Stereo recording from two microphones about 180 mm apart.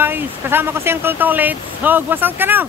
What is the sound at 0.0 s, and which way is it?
Speech, 10° right (ahead or behind).